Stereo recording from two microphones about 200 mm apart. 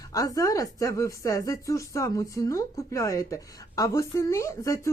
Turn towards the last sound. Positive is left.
turn(degrees=15)  # may be behind; listen again after turning